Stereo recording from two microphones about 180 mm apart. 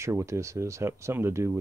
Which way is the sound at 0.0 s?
15° right (ahead or behind).